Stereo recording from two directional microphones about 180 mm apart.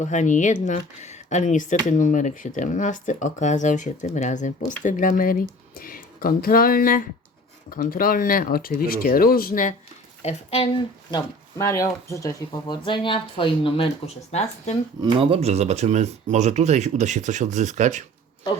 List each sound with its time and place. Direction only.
0.0 s speech: 40° left (ahead or behind)
10.2 s speech: 35° left (ahead or behind)
11.1 s speech: 15° left (ahead or behind); by 14.8 s 35° left (ahead or behind)
15.2 s speech: 35° right (ahead or behind)